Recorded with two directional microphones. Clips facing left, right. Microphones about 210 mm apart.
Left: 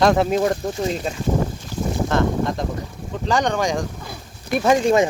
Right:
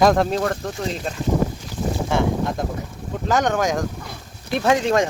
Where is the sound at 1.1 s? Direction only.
Centre (ahead or behind).